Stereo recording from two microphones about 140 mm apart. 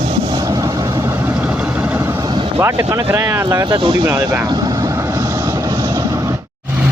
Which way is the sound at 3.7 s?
35° right (ahead or behind).